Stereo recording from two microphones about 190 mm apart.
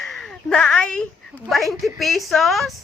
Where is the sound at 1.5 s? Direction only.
Centre (ahead or behind).